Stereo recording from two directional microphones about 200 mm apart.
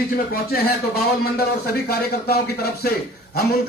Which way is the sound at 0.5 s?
50° left (ahead or behind).